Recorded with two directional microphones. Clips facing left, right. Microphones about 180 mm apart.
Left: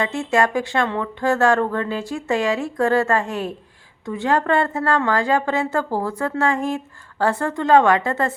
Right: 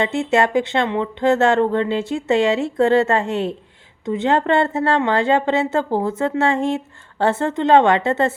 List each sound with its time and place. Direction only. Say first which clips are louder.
0.0 s a woman's voice: right 2 dB; 25° right (ahead or behind)